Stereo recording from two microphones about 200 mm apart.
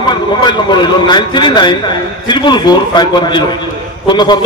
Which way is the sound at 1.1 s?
20° left (ahead or behind).